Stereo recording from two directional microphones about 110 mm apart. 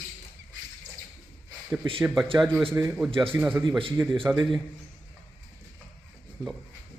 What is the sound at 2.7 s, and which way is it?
A man's voice, 25° right (ahead or behind).